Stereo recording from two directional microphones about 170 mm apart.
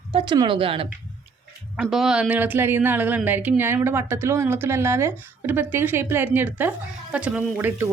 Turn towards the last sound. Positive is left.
turn(degrees=-10)  # may be behind; listen again after turning